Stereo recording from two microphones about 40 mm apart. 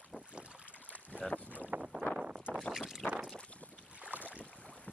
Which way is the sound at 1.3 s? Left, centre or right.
Left.